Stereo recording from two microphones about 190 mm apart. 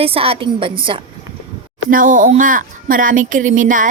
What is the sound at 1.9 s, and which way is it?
A woman's voice, 45° right (ahead or behind).